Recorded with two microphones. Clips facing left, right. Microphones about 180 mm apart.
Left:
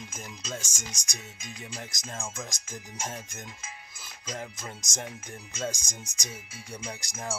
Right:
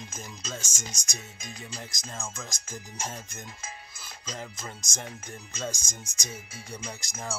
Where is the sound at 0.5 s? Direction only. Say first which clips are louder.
Even; 15° left (ahead or behind).